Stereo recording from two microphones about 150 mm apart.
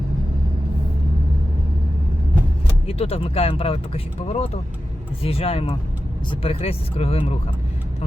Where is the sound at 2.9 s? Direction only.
40° left (ahead or behind).